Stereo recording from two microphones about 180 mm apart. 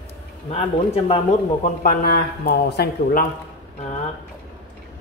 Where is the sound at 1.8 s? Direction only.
60° left (ahead or behind).